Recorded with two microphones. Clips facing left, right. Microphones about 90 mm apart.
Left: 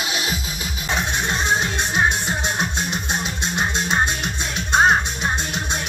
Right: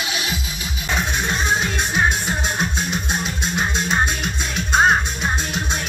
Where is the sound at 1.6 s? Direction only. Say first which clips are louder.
Even; 20° left (ahead or behind).